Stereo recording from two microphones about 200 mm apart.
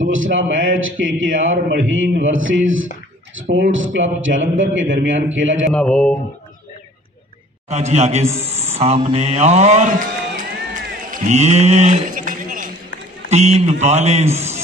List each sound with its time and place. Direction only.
0.0 s a man's voice: 75° right (ahead or behind)
5.7 s speech: 5° left (ahead or behind)
7.7 s a man's voice: 35° right (ahead or behind)
11.1 s a sound: 35° right (ahead or behind)
13.3 s speech: 35° right (ahead or behind)